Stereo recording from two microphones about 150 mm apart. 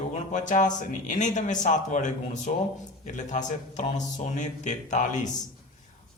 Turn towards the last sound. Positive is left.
turn(degrees=55)  # may be behind; listen again after turning